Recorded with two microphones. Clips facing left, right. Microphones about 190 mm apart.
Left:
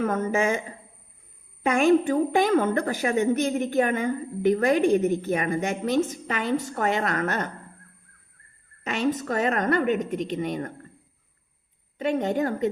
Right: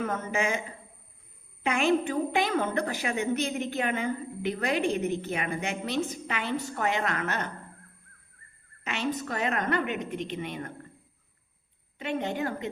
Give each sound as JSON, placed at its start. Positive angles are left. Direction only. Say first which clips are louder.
{"t": 0.0, "sound": "a woman's voice", "louder": "left 6 dB", "side_deg": 45}
{"t": 1.6, "sound": "a woman's voice", "louder": "left 6 dB", "side_deg": 45}
{"t": 8.8, "sound": "a woman's voice", "louder": "left 6 dB", "side_deg": 40}
{"t": 11.9, "sound": "a woman's voice", "louder": "left 6 dB", "side_deg": 45}